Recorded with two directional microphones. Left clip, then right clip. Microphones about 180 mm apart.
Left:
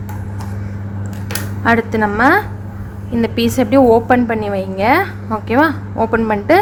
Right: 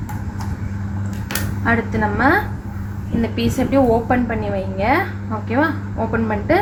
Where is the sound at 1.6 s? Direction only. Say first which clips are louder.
Left 6 dB; 60° left (ahead or behind).